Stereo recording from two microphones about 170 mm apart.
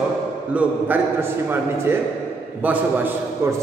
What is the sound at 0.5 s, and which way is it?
A man's voice, 10° right (ahead or behind).